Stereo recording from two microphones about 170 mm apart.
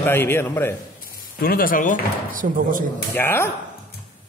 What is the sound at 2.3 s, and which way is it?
Speech, 55° right (ahead or behind).